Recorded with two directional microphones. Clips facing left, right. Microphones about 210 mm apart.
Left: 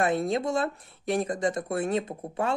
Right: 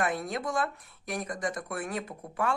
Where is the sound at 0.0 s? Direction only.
25° left (ahead or behind).